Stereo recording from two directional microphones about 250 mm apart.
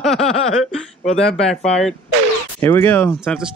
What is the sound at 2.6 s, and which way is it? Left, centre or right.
Speech, centre.